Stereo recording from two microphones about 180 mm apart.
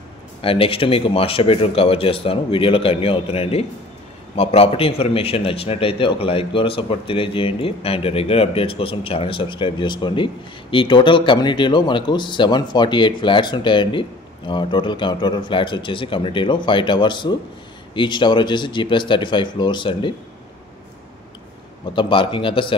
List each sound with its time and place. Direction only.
0.4 s a man's voice: 30° left (ahead or behind)
21.9 s a man's voice: 30° left (ahead or behind)